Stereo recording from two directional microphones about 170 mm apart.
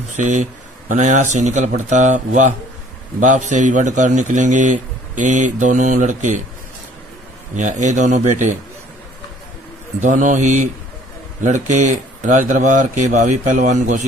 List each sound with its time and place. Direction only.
0.1 s speech: 45° right (ahead or behind)
7.5 s speech: 45° right (ahead or behind)
10.0 s speech: 45° right (ahead or behind)